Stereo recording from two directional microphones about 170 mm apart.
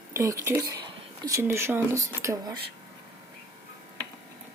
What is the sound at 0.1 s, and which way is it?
Speech, 20° right (ahead or behind).